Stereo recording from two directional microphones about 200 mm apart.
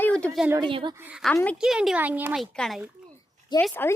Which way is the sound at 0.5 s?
25° right (ahead or behind).